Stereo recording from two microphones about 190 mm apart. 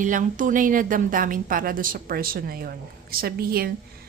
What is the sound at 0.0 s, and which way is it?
A woman's voice, 45° right (ahead or behind).